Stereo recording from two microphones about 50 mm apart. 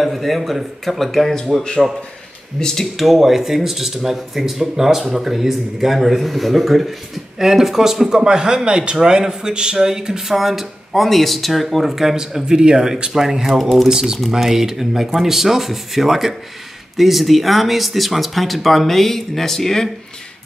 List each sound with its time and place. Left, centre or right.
0.0 s speech: centre
13.6 s speech: centre
13.8 s speech: centre